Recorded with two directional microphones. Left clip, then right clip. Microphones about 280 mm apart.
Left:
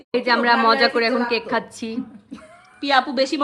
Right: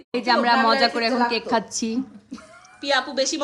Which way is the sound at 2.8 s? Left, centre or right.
Left.